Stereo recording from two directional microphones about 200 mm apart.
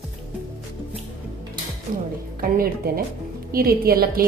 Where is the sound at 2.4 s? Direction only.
45° right (ahead or behind).